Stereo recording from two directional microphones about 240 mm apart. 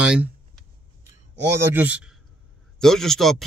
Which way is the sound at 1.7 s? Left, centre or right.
Centre.